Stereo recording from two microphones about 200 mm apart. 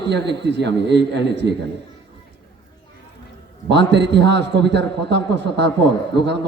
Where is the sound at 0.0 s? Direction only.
60° right (ahead or behind).